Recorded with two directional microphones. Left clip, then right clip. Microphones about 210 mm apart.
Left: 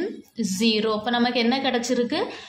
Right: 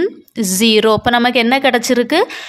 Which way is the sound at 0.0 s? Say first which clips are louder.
Right 11 dB; 40° right (ahead or behind).